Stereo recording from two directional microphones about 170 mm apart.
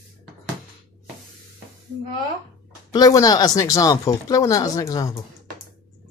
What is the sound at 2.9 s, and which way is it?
Speech, 20° left (ahead or behind).